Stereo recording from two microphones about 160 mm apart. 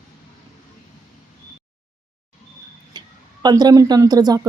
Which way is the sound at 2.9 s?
25° right (ahead or behind).